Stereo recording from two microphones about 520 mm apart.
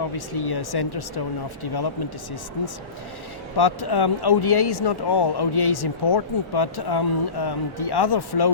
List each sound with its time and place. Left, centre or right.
0.0 s speech: left
3.6 s speech: left